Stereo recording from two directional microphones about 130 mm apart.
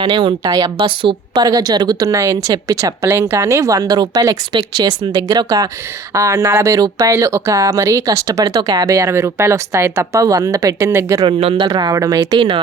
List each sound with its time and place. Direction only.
0.0 s a woman's voice: 35° right (ahead or behind); by 11.3 s 20° right (ahead or behind)
11.3 s speech: 45° right (ahead or behind)
11.7 s speech: 25° right (ahead or behind)